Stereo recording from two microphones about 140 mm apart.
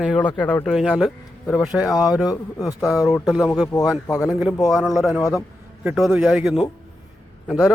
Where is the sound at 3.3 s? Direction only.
5° right (ahead or behind).